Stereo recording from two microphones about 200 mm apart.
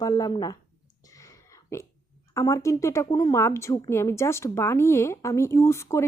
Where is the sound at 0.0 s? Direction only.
20° left (ahead or behind).